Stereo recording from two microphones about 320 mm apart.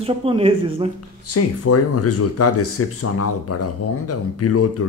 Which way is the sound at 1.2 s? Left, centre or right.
Left.